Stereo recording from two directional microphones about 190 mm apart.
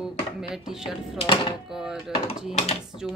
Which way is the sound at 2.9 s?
25° left (ahead or behind).